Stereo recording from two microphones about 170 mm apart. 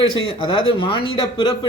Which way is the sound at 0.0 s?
30° left (ahead or behind).